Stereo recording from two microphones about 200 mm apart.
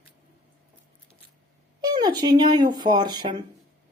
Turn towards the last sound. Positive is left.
turn(degrees=-20)  # may be behind; listen again after turning